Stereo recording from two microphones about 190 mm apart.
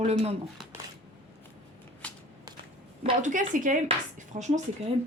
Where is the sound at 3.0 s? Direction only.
40° right (ahead or behind).